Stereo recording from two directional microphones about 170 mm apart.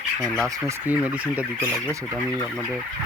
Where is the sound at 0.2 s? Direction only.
5° left (ahead or behind).